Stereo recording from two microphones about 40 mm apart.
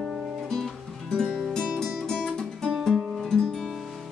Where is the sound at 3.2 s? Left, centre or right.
Centre.